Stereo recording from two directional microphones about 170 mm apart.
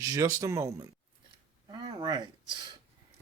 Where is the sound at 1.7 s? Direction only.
25° right (ahead or behind).